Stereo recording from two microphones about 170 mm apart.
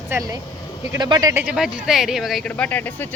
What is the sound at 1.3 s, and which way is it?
Speech, 10° right (ahead or behind).